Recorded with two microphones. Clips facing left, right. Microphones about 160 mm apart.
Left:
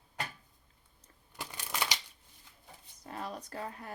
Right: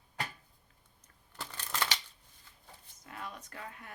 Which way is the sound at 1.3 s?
10° left (ahead or behind).